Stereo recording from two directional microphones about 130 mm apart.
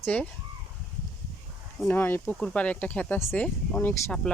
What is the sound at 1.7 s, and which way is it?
Speech, 15° left (ahead or behind).